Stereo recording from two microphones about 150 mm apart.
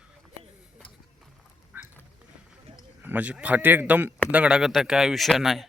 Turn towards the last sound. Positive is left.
turn(degrees=0)  # may be behind; listen again after turning